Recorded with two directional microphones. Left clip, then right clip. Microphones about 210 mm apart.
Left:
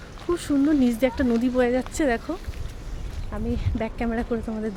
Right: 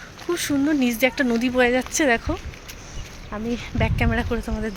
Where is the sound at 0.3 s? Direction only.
10° left (ahead or behind).